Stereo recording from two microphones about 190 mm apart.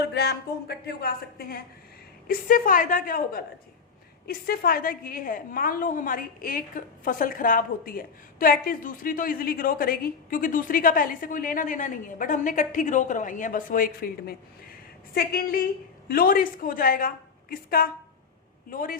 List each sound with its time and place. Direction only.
0.0 s a woman's voice: 60° left (ahead or behind)